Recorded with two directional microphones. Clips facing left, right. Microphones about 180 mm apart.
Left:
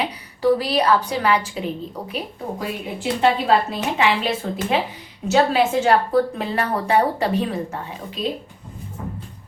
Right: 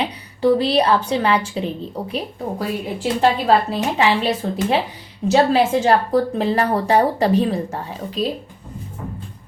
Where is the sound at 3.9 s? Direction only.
35° right (ahead or behind).